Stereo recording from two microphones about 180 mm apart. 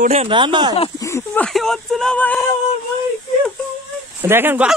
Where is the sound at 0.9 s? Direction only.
15° left (ahead or behind).